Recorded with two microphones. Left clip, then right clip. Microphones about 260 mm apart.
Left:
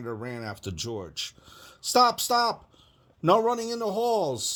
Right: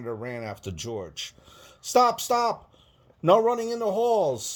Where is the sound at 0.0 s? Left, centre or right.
Left.